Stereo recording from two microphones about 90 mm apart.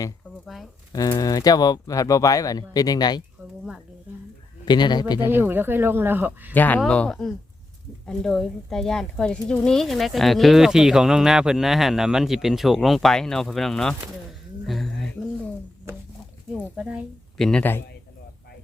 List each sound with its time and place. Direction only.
0.4 s a sound: centre (ahead or behind)
0.9 s speech: 40° left (ahead or behind)
4.6 s speech: 55° left (ahead or behind)
5.2 s speech: 25° right (ahead or behind)
6.5 s speech: 20° left (ahead or behind); by 14.8 s centre (ahead or behind)
16.7 s speech: 15° right (ahead or behind)
17.3 s a man's voice: 5° left (ahead or behind)
17.6 s speech: 25° left (ahead or behind)